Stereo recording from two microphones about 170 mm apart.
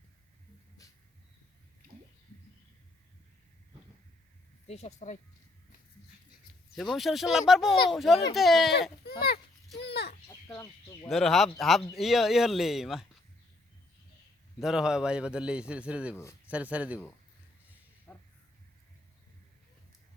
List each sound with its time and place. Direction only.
0.8 s a sound: 20° left (ahead or behind)
1.8 s a sound: 60° right (ahead or behind)
4.7 s speech: 40° left (ahead or behind)
6.7 s a man's voice: centre (ahead or behind)
9.2 s children playing: 70° left (ahead or behind)
10.2 s chicken: 15° left (ahead or behind)
11.1 s a man's voice: centre (ahead or behind)
14.6 s a man's voice: 5° right (ahead or behind)
18.1 s crow: 10° left (ahead or behind)